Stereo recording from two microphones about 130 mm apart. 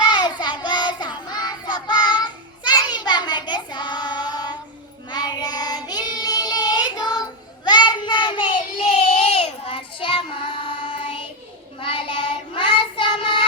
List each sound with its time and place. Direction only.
0.0 s child singing: 35° left (ahead or behind)